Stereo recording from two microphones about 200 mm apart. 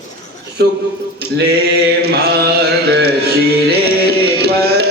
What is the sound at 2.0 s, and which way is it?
Mantra, 50° right (ahead or behind).